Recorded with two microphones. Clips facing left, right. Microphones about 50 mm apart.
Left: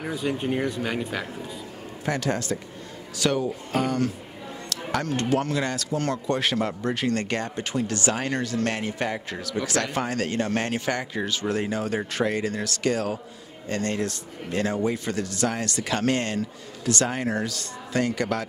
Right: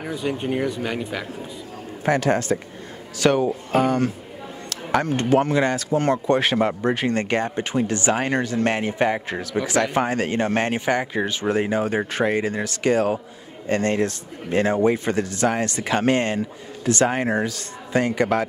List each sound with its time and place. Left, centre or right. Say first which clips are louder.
0.0 s speech: right 2 dB; centre
2.0 s speech: right 7 dB; right
3.7 s speech: right 5 dB; right